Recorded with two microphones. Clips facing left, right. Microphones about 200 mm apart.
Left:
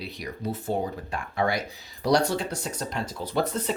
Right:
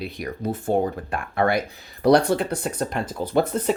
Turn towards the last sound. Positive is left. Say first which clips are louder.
# right 6 dB
turn(degrees=-55)  # may be behind; listen again after turning